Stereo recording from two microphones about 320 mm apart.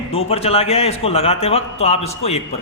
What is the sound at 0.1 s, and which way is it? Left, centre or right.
A man's voice, centre.